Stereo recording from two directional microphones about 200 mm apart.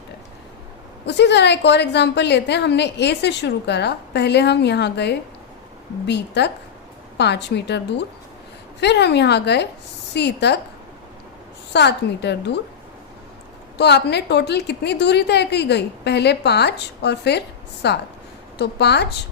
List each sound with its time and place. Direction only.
1.0 s a woman's voice: 60° left (ahead or behind)
11.7 s a woman's voice: 60° left (ahead or behind)
13.7 s a woman's voice: 55° left (ahead or behind)